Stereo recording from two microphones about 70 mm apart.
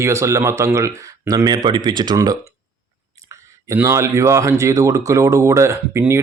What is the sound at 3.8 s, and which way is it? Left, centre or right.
A man's voice, right.